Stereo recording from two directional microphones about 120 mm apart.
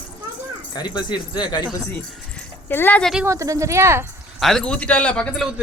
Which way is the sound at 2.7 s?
15° left (ahead or behind).